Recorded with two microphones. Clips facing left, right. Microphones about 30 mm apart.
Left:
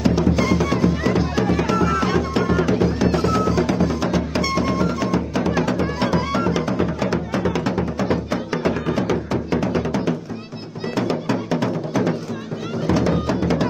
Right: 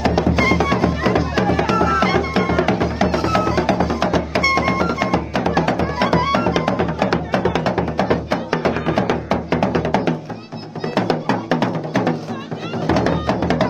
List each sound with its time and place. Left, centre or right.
0.0 s music: right